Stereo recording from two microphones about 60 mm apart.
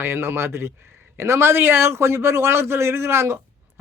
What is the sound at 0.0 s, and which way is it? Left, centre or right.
A man's voice, right.